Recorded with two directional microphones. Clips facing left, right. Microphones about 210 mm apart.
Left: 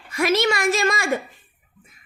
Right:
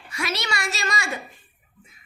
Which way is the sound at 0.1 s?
50° left (ahead or behind).